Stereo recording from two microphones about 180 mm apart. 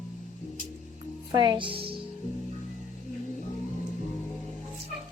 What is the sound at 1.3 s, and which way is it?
Speech, 20° right (ahead or behind).